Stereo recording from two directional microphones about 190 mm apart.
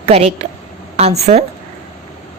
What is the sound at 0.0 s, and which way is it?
A woman's voice, 35° right (ahead or behind).